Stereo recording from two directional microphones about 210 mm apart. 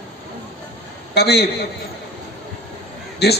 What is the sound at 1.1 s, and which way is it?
Speech, 50° left (ahead or behind).